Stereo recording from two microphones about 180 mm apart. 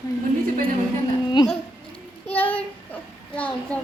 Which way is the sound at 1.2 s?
25° left (ahead or behind).